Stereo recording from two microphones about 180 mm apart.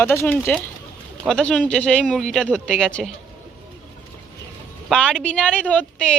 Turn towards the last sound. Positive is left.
turn(degrees=5)  # may be behind; listen again after turning